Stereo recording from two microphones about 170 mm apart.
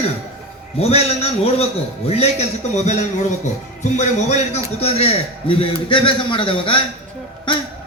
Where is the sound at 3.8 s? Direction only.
45° left (ahead or behind).